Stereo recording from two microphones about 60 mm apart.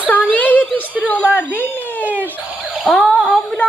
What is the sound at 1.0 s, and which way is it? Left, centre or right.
Speech, left.